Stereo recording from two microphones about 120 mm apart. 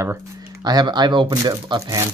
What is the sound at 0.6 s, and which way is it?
Speech, 35° right (ahead or behind).